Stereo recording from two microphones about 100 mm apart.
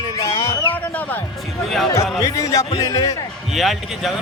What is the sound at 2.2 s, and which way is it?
Speech, 35° left (ahead or behind).